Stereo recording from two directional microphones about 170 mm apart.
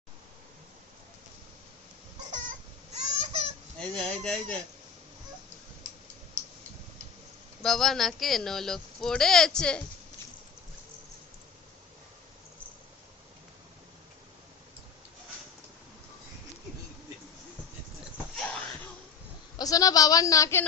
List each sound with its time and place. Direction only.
2.9 s a sound: 40° right (ahead or behind)
3.8 s fowl: 5° left (ahead or behind)
4.2 s speech: 5° left (ahead or behind)
7.6 s speech: centre (ahead or behind)
18.3 s a sound: 5° left (ahead or behind)
19.5 s speech: 20° left (ahead or behind)